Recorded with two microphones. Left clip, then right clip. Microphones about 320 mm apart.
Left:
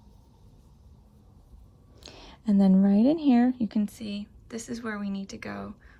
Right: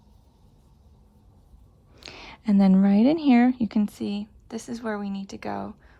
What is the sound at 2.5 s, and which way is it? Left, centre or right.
Speech, left.